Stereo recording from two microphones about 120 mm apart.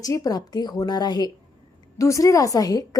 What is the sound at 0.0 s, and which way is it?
A woman's voice, 30° left (ahead or behind).